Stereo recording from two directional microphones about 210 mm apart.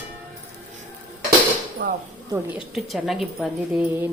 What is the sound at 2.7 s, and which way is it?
A woman's voice, centre (ahead or behind).